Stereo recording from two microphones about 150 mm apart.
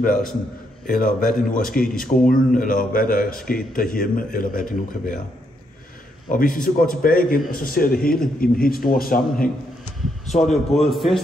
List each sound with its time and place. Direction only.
0.0 s a man's voice: 65° left (ahead or behind)
6.2 s a man's voice: 65° left (ahead or behind)
10.2 s a man's voice: 50° left (ahead or behind)
10.9 s a man's voice: centre (ahead or behind)